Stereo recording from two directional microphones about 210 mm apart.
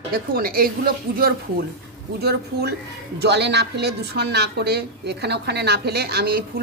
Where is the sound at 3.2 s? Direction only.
55° right (ahead or behind).